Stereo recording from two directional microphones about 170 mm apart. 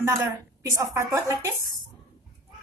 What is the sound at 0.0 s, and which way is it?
A woman's voice, 15° right (ahead or behind).